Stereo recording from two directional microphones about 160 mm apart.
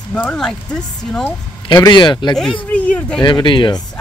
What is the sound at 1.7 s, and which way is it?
Speech, 25° left (ahead or behind).